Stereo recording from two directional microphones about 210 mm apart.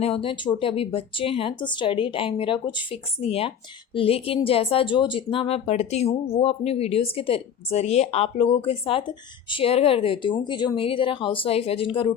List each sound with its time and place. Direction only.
0.0 s speech: 25° left (ahead or behind)